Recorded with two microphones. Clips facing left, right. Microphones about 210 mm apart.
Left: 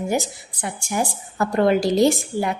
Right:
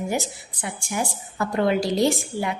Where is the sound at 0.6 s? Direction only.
45° left (ahead or behind).